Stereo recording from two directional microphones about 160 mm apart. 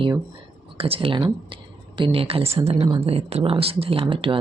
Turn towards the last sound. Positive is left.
turn(degrees=-35)  # may be behind; listen again after turning